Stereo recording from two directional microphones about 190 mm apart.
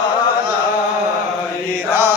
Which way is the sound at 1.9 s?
10° right (ahead or behind).